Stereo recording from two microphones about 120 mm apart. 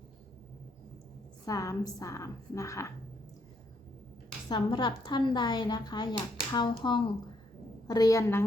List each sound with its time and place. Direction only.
1.5 s a woman's voice: 30° left (ahead or behind)
4.4 s a woman's voice: 40° left (ahead or behind); by 8.4 s 20° left (ahead or behind)